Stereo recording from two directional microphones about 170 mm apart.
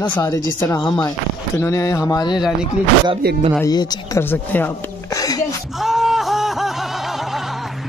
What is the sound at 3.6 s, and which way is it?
Speech, 20° left (ahead or behind).